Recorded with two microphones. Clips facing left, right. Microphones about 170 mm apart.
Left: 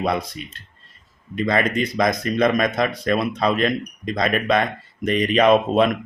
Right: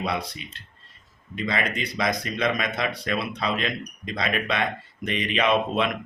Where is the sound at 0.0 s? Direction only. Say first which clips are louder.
Left 6 dB; 45° left (ahead or behind).